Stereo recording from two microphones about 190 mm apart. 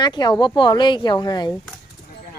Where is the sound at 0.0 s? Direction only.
25° left (ahead or behind).